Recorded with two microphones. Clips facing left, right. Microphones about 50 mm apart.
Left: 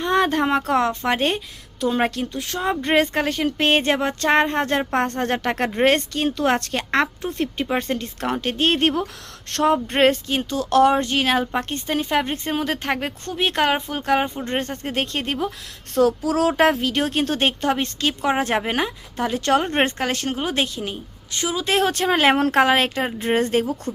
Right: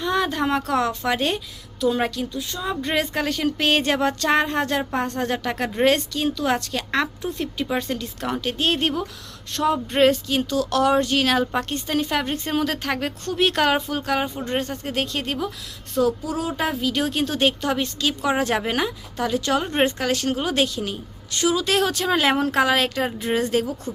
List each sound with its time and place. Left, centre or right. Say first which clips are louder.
0.0 s a sound: left 3 dB; left
0.4 s speech: left 2 dB; left
4.9 s speech: left 3 dB; left
9.5 s speech: left 3 dB; left
9.8 s speech: even; left
16.0 s speech: left 4 dB; left
16.9 s speech: left 2 dB; left